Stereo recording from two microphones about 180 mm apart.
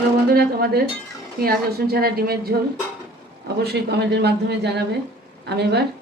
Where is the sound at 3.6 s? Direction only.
65° right (ahead or behind).